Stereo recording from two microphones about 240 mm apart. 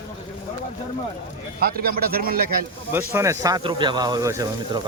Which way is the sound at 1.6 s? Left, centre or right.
Right.